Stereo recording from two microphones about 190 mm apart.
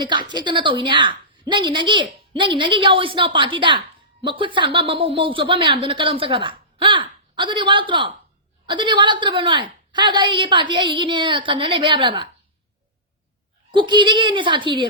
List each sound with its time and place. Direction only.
0.0 s a woman's voice: 25° right (ahead or behind)
13.7 s a woman's voice: 25° right (ahead or behind)